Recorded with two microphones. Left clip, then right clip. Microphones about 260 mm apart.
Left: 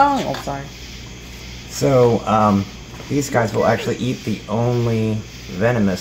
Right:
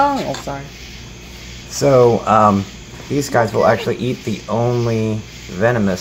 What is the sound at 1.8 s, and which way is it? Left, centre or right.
Speech, centre.